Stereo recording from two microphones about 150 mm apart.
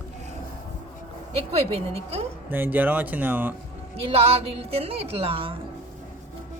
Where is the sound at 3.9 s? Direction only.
40° right (ahead or behind).